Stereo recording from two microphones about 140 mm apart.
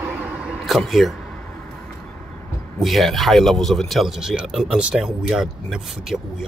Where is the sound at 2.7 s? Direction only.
Centre (ahead or behind).